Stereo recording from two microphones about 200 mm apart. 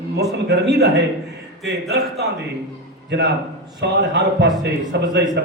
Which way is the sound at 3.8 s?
60° right (ahead or behind).